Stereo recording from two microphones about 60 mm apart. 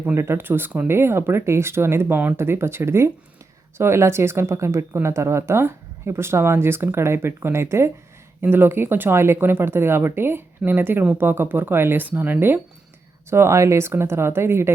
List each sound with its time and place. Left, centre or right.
0.1 s speech: right
8.4 s speech: right
13.3 s speech: right